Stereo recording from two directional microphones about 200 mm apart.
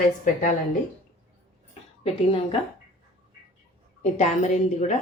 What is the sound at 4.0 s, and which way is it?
A woman's voice, 35° left (ahead or behind).